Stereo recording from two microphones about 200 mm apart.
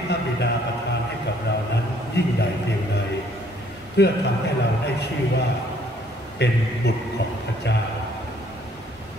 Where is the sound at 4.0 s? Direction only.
60° left (ahead or behind).